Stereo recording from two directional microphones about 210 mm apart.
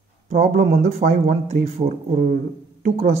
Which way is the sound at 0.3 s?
35° right (ahead or behind).